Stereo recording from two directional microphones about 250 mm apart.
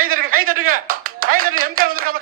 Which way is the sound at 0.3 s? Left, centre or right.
Right.